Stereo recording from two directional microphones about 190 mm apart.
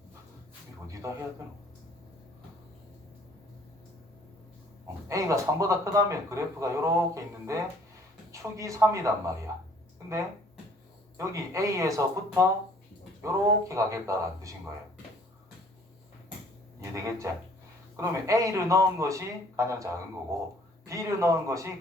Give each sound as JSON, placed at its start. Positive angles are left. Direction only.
{"t": 1.0, "sound": "speech", "side_deg": -15}
{"t": 5.0, "sound": "speech", "side_deg": -15}
{"t": 11.2, "sound": "speech", "side_deg": -15}
{"t": 16.9, "sound": "speech", "side_deg": -15}